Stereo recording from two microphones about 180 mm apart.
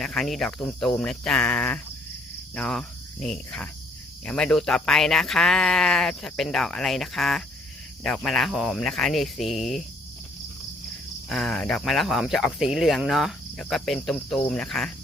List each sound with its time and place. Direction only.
0.0 s speech: centre (ahead or behind)
2.6 s cricket: 5° left (ahead or behind)
4.3 s speech: 5° left (ahead or behind)
9.5 s speech: 40° left (ahead or behind)
11.3 s speech: centre (ahead or behind)